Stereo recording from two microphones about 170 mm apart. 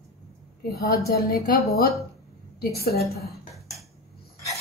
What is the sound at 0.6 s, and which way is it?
A woman's voice, 65° left (ahead or behind).